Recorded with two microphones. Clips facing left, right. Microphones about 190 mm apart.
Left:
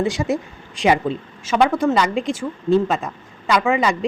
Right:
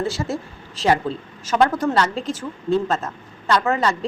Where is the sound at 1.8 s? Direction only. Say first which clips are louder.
Left 3 dB; 10° left (ahead or behind).